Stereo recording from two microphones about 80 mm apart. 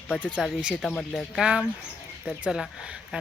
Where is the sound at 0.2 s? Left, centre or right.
Centre.